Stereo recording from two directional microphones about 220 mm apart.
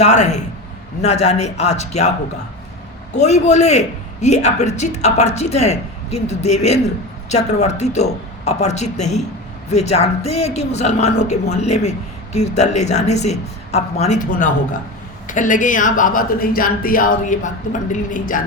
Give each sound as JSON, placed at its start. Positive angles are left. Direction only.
{"t": 0.0, "sound": "a woman's voice", "side_deg": 30}
{"t": 3.2, "sound": "a woman's voice", "side_deg": 30}